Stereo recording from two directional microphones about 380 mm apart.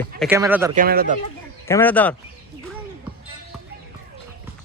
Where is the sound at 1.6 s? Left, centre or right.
Centre.